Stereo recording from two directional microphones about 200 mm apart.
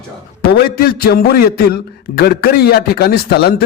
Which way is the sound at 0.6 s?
50° left (ahead or behind).